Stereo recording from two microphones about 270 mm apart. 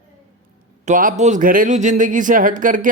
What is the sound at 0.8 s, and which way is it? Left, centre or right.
Speech, right.